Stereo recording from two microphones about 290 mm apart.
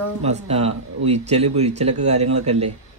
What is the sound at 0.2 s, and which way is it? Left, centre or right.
Speech, right.